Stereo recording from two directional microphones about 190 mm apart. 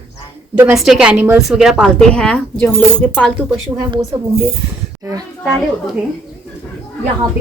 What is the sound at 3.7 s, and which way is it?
Speech, 20° right (ahead or behind).